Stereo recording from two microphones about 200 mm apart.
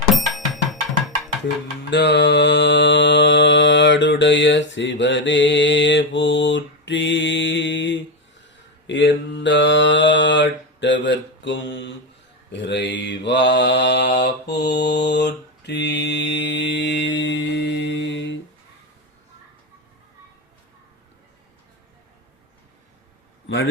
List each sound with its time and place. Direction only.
0.1 s music: centre (ahead or behind)
1.9 s mantra: 55° left (ahead or behind)